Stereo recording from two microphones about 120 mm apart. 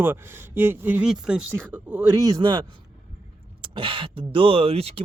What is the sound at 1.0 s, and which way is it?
Speech, 5° right (ahead or behind).